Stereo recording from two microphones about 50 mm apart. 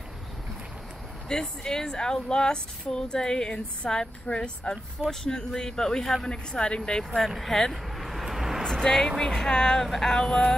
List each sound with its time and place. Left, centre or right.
1.3 s a woman's voice: centre
7.2 s speech: centre
7.7 s vehicle: centre
8.6 s a woman's voice: centre